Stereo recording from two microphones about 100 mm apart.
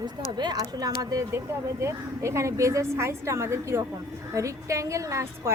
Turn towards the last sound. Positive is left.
turn(degrees=-30)  # may be behind; listen again after turning